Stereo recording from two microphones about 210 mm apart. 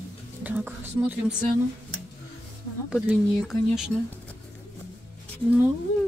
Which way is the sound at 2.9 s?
5° right (ahead or behind).